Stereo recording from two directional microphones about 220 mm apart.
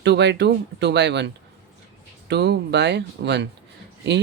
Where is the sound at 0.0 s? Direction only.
50° right (ahead or behind).